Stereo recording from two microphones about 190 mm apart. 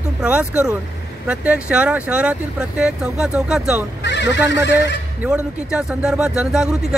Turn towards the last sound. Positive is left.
turn(degrees=-5)  # may be behind; listen again after turning